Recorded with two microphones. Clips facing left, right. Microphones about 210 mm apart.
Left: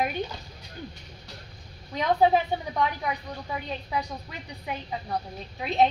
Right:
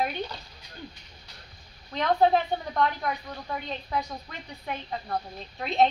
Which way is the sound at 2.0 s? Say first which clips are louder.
Left 1 dB; 10° left (ahead or behind).